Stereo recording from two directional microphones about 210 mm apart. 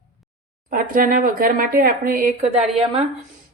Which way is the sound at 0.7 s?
40° right (ahead or behind).